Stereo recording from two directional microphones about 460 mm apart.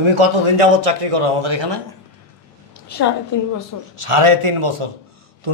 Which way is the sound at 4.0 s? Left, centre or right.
Right.